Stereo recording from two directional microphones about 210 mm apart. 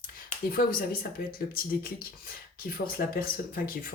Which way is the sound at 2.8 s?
45° left (ahead or behind).